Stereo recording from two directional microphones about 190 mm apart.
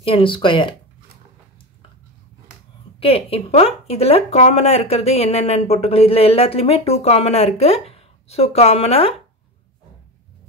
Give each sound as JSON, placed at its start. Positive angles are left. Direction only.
{"t": 0.0, "sound": "speech", "side_deg": 30}
{"t": 3.0, "sound": "speech", "side_deg": 30}